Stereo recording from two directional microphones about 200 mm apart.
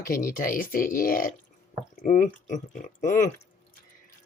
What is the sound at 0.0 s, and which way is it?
Speech, 45° left (ahead or behind).